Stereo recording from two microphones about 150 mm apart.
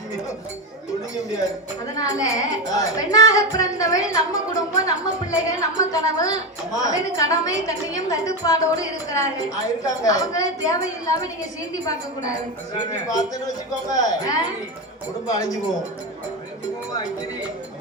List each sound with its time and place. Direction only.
2.0 s a woman's voice: 25° left (ahead or behind)
12.7 s a woman's voice: 25° left (ahead or behind)